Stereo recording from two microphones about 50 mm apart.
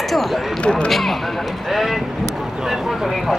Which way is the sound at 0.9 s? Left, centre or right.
Centre.